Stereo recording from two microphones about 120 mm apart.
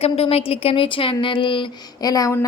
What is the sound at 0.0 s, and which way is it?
Speech, 55° left (ahead or behind).